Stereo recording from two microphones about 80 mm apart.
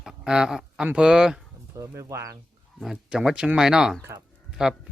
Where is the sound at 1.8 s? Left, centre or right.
Right.